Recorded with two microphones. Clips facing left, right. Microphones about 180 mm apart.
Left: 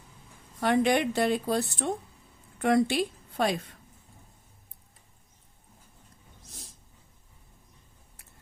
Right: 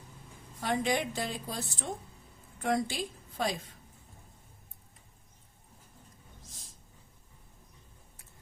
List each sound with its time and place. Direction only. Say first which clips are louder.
0.6 s a woman's voice: left 7 dB; 65° left (ahead or behind)